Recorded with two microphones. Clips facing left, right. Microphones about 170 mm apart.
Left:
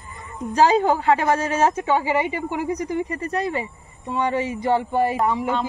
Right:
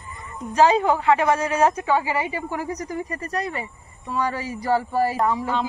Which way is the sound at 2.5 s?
20° left (ahead or behind).